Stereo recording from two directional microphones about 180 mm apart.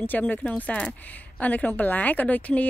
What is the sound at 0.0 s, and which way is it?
A woman's voice, 10° left (ahead or behind).